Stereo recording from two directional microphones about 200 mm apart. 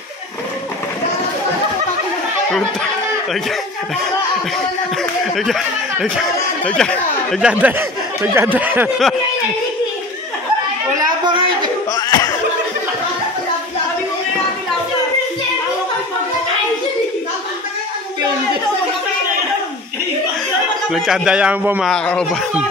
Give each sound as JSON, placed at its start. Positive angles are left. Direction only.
{"t": 5.2, "sound": "speech", "side_deg": 0}
{"t": 11.0, "sound": "a sound", "side_deg": -25}
{"t": 11.9, "sound": "slap", "side_deg": 20}
{"t": 20.9, "sound": "speech", "side_deg": -5}
{"t": 21.9, "sound": "speech", "side_deg": 5}